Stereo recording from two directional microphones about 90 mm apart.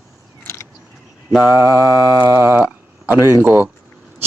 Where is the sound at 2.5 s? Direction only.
15° right (ahead or behind).